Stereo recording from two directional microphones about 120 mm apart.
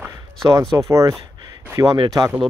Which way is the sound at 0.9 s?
25° right (ahead or behind).